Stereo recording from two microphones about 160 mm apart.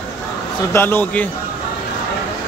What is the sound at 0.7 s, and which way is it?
Speech, 15° left (ahead or behind).